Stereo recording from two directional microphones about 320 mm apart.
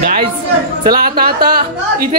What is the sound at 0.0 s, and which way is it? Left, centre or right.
Speech, right.